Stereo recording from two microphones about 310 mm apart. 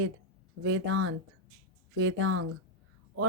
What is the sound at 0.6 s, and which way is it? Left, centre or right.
Speech, right.